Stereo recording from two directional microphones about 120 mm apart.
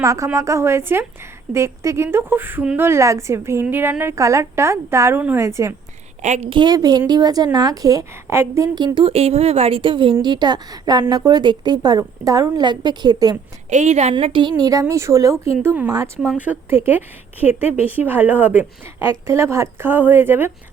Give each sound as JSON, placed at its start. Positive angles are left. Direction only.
{"t": 0.0, "sound": "speech", "side_deg": -25}
{"t": 6.2, "sound": "a woman's voice", "side_deg": -70}
{"t": 6.5, "sound": "a woman's voice", "side_deg": -35}
{"t": 9.0, "sound": "a woman's voice", "side_deg": -60}
{"t": 13.7, "sound": "a woman's voice", "side_deg": -70}
{"t": 14.3, "sound": "speech", "side_deg": -35}
{"t": 15.6, "sound": "a woman's voice", "side_deg": -15}
{"t": 15.9, "sound": "speech", "side_deg": -30}
{"t": 16.4, "sound": "a woman's voice", "side_deg": -15}